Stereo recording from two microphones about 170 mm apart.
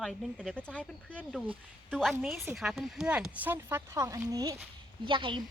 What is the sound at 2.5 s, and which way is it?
Speech, centre (ahead or behind).